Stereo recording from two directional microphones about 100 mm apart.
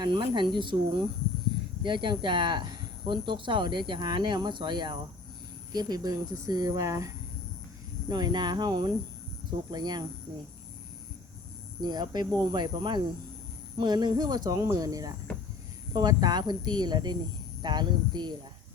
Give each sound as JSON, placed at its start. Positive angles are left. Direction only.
{"t": 0.0, "sound": "speech", "side_deg": -50}
{"t": 1.8, "sound": "speech", "side_deg": -50}
{"t": 8.0, "sound": "speech", "side_deg": -45}
{"t": 11.8, "sound": "speech", "side_deg": -45}